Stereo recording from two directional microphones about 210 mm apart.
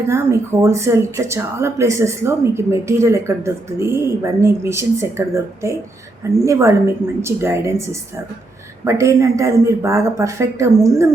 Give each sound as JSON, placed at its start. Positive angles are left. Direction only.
{"t": 0.1, "sound": "speech", "side_deg": -15}